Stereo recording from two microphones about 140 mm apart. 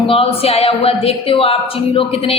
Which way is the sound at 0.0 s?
40° left (ahead or behind).